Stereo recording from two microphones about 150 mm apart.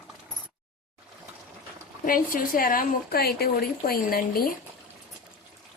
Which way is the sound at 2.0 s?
70° left (ahead or behind).